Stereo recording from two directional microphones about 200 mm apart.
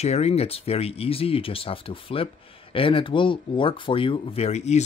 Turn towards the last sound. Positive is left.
turn(degrees=35)  # may be behind; listen again after turning